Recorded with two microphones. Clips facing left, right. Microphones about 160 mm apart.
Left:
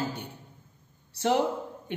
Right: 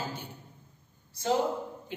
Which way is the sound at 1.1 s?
70° left (ahead or behind).